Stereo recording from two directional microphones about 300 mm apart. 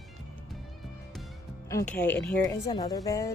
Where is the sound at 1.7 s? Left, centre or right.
Centre.